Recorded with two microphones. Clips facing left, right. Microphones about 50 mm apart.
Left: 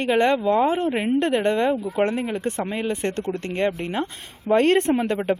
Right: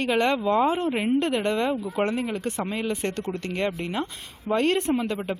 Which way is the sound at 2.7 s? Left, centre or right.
Centre.